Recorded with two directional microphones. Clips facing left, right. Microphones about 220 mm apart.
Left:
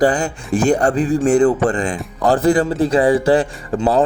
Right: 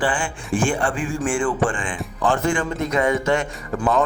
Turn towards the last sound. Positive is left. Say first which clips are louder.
# left 5 dB
turn(degrees=30)  # may be behind; listen again after turning